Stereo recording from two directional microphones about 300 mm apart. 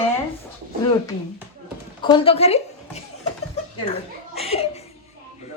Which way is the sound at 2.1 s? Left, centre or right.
Centre.